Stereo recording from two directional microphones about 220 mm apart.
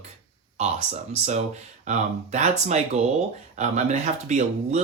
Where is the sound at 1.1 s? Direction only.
30° right (ahead or behind).